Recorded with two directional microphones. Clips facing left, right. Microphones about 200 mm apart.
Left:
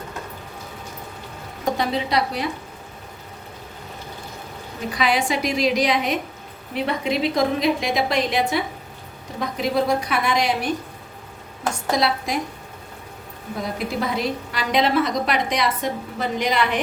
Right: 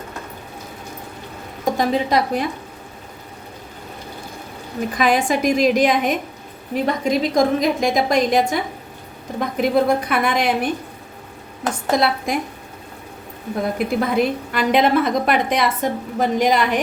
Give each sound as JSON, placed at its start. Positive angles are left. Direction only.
{"t": 1.7, "sound": "a woman's voice", "side_deg": -45}
{"t": 4.9, "sound": "a woman's voice", "side_deg": -50}
{"t": 11.9, "sound": "a woman's voice", "side_deg": -55}
{"t": 13.6, "sound": "a woman's voice", "side_deg": -55}